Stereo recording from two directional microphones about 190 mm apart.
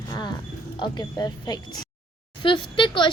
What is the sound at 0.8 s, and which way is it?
A woman's voice, 20° left (ahead or behind).